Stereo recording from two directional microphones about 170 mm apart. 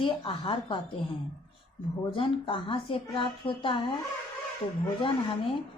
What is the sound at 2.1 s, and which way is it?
Speech, 30° left (ahead or behind).